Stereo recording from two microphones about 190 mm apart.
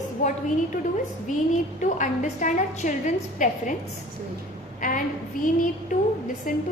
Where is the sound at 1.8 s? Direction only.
40° left (ahead or behind).